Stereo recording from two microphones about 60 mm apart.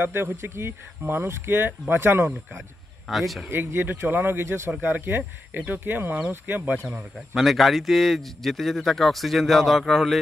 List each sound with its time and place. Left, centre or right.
0.0 s speech: right
3.1 s a man's voice: centre
3.4 s speech: right
7.3 s a man's voice: centre